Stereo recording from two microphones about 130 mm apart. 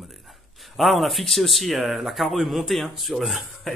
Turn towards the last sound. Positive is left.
turn(degrees=0)  # may be behind; listen again after turning